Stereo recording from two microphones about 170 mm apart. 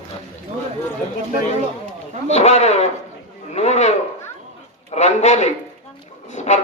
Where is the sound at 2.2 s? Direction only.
40° left (ahead or behind).